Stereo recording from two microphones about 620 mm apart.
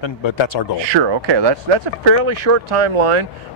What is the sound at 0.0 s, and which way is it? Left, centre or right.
Speech, left.